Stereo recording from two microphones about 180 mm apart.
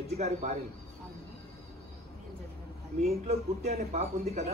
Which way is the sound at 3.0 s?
35° right (ahead or behind).